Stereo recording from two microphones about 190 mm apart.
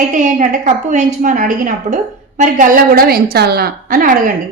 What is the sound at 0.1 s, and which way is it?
A woman's voice, 40° right (ahead or behind).